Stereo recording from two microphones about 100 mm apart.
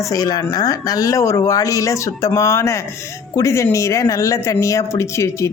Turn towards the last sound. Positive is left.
turn(degrees=30)  # may be behind; listen again after turning